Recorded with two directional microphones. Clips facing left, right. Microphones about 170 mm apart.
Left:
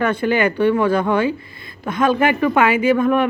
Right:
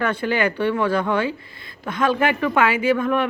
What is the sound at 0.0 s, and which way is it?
Speech, 20° left (ahead or behind).